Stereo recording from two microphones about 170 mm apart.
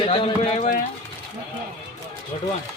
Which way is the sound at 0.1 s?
30° left (ahead or behind).